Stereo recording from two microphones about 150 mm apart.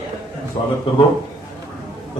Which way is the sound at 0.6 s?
35° left (ahead or behind).